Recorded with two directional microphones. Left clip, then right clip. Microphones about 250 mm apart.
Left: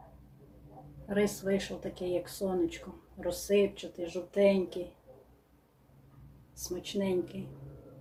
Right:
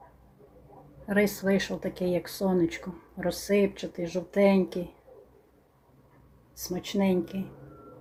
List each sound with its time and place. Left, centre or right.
1.0 s speech: right
6.6 s speech: right